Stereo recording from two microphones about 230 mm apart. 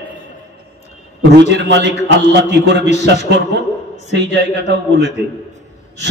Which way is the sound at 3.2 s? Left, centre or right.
Right.